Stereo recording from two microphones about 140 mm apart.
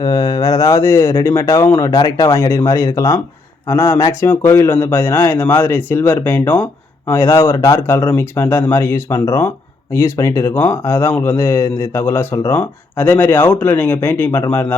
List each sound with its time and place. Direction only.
0.0 s speech: 25° left (ahead or behind)